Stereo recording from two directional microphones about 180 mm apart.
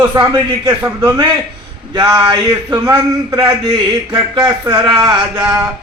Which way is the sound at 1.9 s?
20° right (ahead or behind).